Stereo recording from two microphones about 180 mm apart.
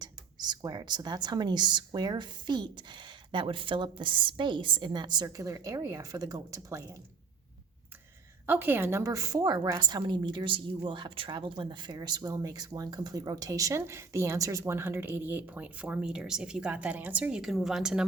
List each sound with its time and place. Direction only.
0.0 s speech: 25° right (ahead or behind)
8.4 s speech: 10° right (ahead or behind)